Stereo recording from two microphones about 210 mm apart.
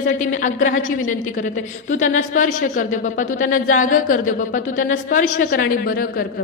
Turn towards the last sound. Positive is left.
turn(degrees=45)  # may be behind; listen again after turning